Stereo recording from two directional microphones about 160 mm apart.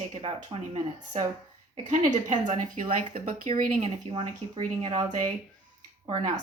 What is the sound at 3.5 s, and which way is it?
Speech, 40° right (ahead or behind).